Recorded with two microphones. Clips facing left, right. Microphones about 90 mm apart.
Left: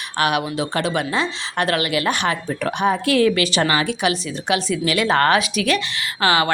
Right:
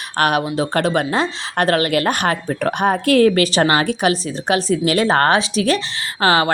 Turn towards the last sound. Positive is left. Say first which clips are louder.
# right 2 dB
turn(degrees=-35)  # may be behind; listen again after turning